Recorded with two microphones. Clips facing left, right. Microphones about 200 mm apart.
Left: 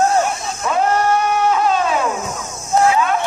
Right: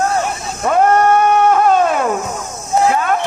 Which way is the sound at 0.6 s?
50° right (ahead or behind).